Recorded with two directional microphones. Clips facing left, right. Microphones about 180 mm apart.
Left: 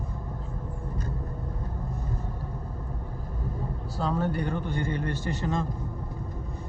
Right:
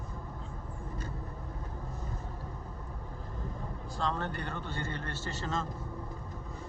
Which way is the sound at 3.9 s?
5° left (ahead or behind).